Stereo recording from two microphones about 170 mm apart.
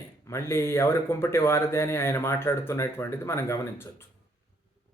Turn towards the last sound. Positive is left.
turn(degrees=15)  # may be behind; listen again after turning